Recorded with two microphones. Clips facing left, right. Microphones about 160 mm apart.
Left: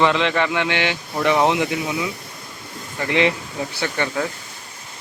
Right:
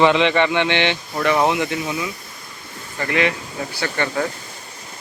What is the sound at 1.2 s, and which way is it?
Speech, 15° left (ahead or behind).